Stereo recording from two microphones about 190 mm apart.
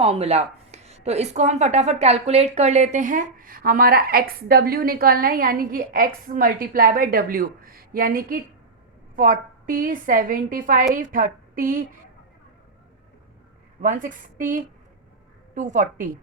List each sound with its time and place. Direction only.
0.0 s a woman's voice: 30° right (ahead or behind)
13.8 s a woman's voice: 45° right (ahead or behind)